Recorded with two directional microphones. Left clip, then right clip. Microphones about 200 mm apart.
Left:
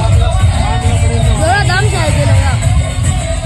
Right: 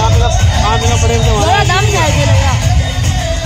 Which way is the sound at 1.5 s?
Centre (ahead or behind).